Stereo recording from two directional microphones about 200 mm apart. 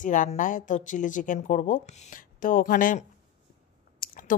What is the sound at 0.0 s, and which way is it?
Speech, 40° left (ahead or behind).